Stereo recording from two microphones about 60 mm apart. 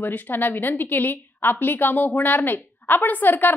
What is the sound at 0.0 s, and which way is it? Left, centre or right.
A woman's voice, left.